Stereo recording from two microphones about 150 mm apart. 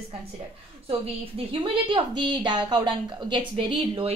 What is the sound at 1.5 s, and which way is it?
A woman's voice, 35° right (ahead or behind).